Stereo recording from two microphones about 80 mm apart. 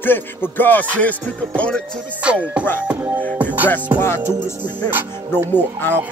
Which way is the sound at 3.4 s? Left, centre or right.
Centre.